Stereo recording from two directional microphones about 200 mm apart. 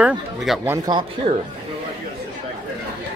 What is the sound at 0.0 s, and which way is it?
Speech, 5° right (ahead or behind).